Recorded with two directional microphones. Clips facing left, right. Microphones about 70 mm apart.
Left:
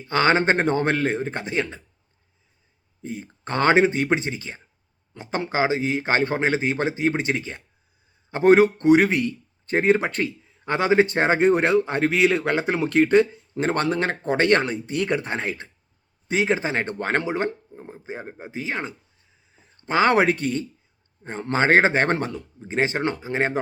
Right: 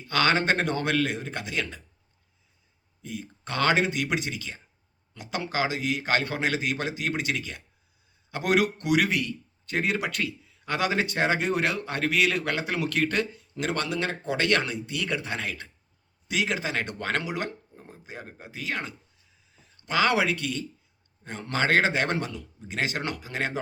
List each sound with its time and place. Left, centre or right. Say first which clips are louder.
0.0 s a man's voice: left 5 dB; left
3.0 s a man's voice: left 4 dB; left